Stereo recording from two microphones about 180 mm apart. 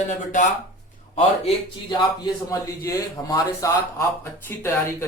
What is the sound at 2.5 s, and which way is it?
Speech, 20° left (ahead or behind).